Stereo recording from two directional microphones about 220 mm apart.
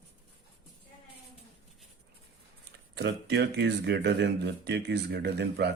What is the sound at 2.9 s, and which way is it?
A man's voice, 50° right (ahead or behind).